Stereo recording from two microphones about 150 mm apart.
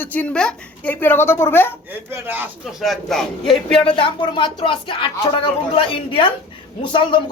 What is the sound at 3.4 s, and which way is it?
Speech, 35° left (ahead or behind).